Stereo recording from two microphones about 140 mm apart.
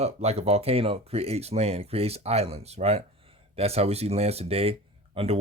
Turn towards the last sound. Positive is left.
turn(degrees=-45)  # may be behind; listen again after turning